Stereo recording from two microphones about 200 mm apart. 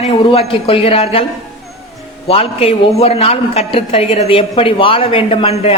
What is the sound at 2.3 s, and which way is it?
A man's voice, 30° left (ahead or behind).